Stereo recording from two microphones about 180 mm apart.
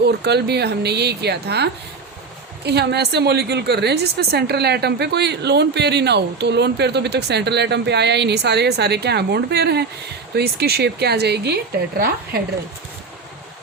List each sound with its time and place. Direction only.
0.0 s a woman's voice: 65° right (ahead or behind)